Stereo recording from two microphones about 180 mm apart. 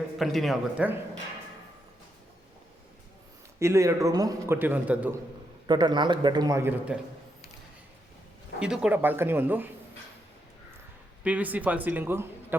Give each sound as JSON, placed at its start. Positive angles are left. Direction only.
{"t": 0.2, "sound": "a man's voice", "side_deg": 0}
{"t": 3.6, "sound": "a man's voice", "side_deg": -15}
{"t": 5.6, "sound": "a man's voice", "side_deg": -25}
{"t": 8.5, "sound": "a man's voice", "side_deg": -5}
{"t": 11.2, "sound": "a man's voice", "side_deg": -10}